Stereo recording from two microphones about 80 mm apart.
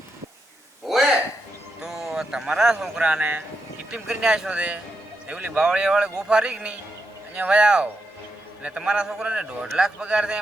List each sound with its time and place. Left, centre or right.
0.9 s a sound: centre
1.8 s speech: centre; by 5.5 s right
5.5 s speech: centre